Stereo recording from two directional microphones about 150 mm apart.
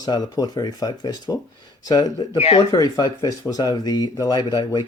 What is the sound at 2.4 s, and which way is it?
Speech, 40° left (ahead or behind).